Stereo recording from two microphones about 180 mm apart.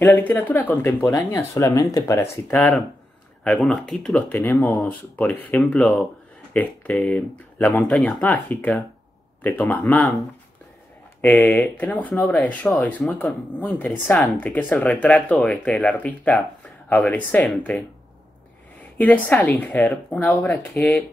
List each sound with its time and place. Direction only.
0.0 s speech: 10° left (ahead or behind)
2.5 s speech: 5° left (ahead or behind)
18.9 s speech: 10° left (ahead or behind)